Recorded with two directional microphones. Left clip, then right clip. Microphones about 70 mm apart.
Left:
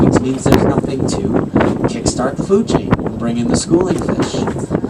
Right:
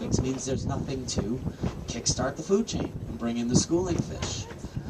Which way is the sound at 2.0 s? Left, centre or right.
Right.